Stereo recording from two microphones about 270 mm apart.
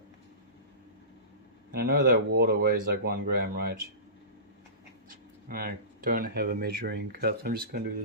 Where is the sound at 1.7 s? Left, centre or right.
Right.